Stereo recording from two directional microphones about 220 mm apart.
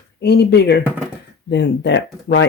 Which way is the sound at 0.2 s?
50° left (ahead or behind).